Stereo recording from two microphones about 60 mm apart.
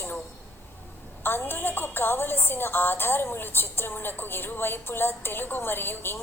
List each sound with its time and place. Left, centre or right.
1.2 s a woman's voice: left